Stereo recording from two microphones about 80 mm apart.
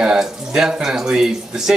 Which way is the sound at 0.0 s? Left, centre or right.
Centre.